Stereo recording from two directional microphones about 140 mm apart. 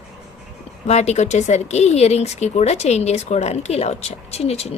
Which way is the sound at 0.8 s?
55° left (ahead or behind).